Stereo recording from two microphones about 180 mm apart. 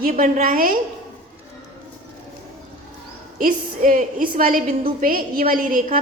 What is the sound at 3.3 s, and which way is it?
A woman's voice, 50° right (ahead or behind).